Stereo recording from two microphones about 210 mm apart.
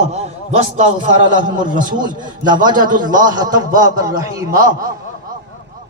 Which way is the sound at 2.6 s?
20° right (ahead or behind).